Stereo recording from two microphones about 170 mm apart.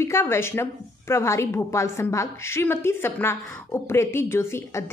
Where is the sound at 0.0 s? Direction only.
15° left (ahead or behind).